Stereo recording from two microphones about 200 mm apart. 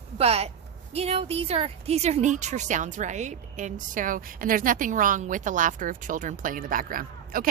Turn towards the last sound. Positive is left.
turn(degrees=-45)  # may be behind; listen again after turning